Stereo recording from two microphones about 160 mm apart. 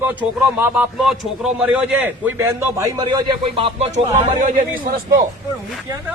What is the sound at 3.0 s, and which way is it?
Speech, 30° right (ahead or behind).